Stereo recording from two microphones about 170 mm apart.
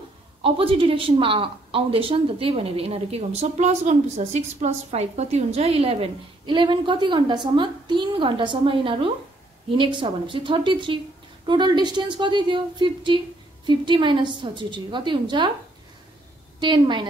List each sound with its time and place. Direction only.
0.4 s a woman's voice: 35° right (ahead or behind)
16.5 s a woman's voice: 25° right (ahead or behind)